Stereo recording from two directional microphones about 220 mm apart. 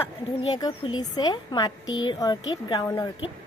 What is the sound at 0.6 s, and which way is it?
A woman's voice, 20° left (ahead or behind).